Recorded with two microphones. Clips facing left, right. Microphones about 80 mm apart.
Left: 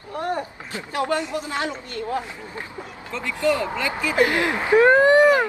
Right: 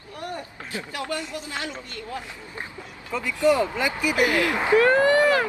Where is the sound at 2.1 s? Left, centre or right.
Left.